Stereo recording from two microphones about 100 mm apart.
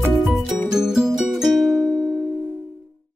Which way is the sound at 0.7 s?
5° right (ahead or behind).